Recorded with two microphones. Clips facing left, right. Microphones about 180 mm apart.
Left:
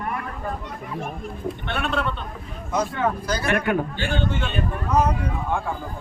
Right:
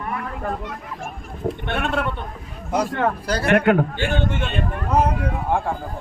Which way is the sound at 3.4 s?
60° right (ahead or behind).